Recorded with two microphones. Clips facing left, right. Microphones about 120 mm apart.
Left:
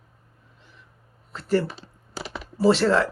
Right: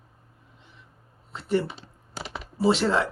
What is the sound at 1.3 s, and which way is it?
Speech, 20° right (ahead or behind).